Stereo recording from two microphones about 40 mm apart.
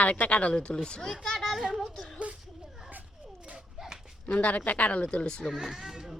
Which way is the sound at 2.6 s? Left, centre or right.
Centre.